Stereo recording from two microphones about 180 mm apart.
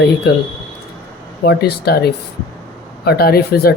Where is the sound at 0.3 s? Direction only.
65° left (ahead or behind).